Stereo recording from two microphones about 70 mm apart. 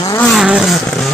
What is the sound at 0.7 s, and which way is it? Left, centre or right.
Vehicle, centre.